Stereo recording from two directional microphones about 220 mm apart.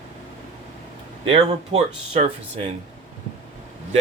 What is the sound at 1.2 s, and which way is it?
Speech, 25° right (ahead or behind).